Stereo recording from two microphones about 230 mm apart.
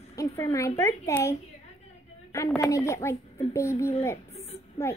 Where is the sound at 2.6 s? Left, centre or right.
Centre.